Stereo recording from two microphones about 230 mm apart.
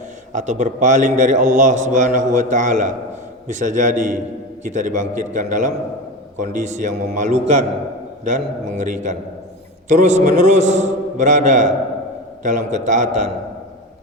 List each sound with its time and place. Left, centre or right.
0.3 s a man's voice: right